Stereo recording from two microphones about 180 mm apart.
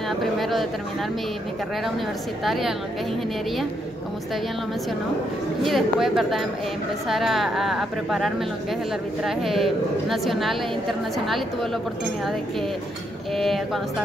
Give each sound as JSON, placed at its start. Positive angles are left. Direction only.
{"t": 0.2, "sound": "speech", "side_deg": 0}
{"t": 2.4, "sound": "a woman's voice", "side_deg": 0}
{"t": 5.6, "sound": "a woman's voice", "side_deg": 0}
{"t": 13.3, "sound": "a woman's voice", "side_deg": 0}